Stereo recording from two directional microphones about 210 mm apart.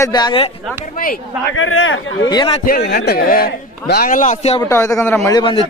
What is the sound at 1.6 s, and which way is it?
Speech, 70° left (ahead or behind).